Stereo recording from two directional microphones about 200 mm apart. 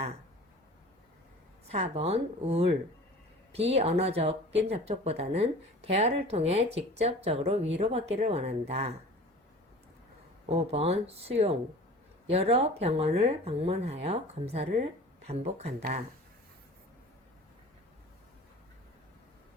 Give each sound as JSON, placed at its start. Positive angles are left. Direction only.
{"t": 1.6, "sound": "speech", "side_deg": -30}
{"t": 10.5, "sound": "speech", "side_deg": -30}